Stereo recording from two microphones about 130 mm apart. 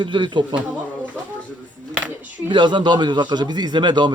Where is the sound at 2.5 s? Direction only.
40° right (ahead or behind).